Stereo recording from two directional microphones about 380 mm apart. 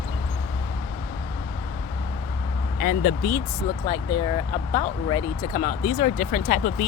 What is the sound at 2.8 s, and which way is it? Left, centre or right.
Speech, left.